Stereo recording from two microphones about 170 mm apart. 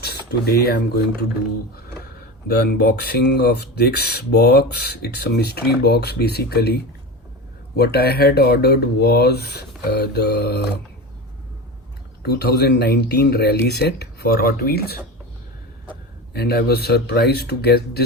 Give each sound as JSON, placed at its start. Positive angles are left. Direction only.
{"t": 0.0, "sound": "speech", "side_deg": 70}
{"t": 12.2, "sound": "speech", "side_deg": 70}
{"t": 16.3, "sound": "speech", "side_deg": 70}